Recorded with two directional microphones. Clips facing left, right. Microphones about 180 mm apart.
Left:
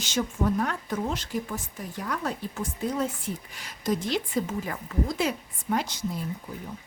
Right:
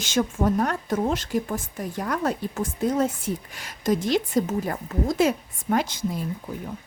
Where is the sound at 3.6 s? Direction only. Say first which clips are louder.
Right 4 dB; 50° right (ahead or behind).